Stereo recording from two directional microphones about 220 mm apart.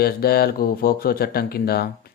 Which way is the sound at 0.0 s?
45° left (ahead or behind).